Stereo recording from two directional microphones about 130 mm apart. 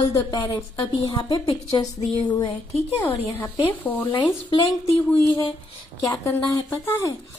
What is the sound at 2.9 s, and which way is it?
Speech, 20° left (ahead or behind).